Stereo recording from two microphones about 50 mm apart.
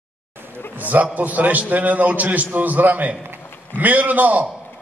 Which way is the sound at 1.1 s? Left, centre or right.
Right.